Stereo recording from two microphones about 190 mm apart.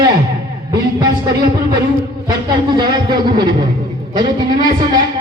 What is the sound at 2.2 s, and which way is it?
Speech, 25° right (ahead or behind).